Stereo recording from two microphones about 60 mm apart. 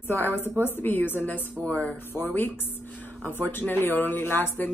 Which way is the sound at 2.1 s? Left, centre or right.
Left.